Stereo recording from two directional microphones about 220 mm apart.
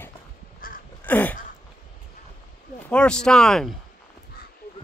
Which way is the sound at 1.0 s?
10° left (ahead or behind).